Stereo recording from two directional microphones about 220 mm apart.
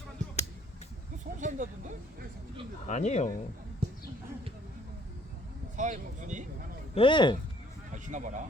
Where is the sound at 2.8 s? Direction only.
30° left (ahead or behind).